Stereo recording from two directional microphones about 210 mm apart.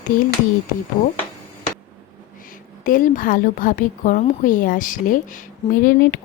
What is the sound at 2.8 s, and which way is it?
Speech, 40° left (ahead or behind).